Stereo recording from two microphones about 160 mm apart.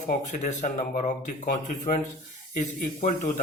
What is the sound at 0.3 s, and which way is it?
Speech, 55° left (ahead or behind).